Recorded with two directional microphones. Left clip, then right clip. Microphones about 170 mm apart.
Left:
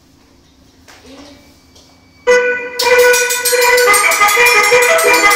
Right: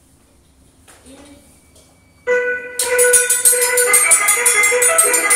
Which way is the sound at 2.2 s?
30° left (ahead or behind).